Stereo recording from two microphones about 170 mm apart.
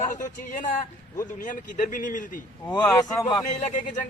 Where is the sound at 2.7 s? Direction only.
15° left (ahead or behind).